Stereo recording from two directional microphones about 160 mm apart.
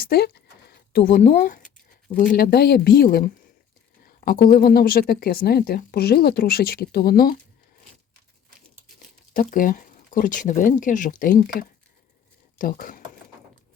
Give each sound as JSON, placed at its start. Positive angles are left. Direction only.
{"t": 0.0, "sound": "a sound", "side_deg": 75}
{"t": 2.3, "sound": "speech", "side_deg": 65}
{"t": 9.3, "sound": "speech", "side_deg": 60}
{"t": 12.5, "sound": "speech", "side_deg": 60}